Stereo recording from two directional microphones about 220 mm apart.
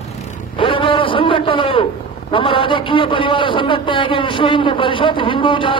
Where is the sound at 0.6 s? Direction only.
25° left (ahead or behind).